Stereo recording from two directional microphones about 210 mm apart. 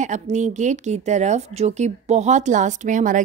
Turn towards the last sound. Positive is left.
turn(degrees=-35)  # may be behind; listen again after turning